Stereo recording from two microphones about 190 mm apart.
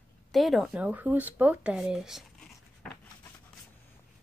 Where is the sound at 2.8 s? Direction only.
5° left (ahead or behind).